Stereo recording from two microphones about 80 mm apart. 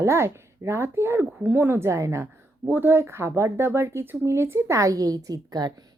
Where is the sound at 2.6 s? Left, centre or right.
Right.